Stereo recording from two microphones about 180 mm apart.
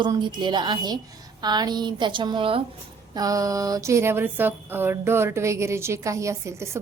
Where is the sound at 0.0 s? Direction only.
25° right (ahead or behind).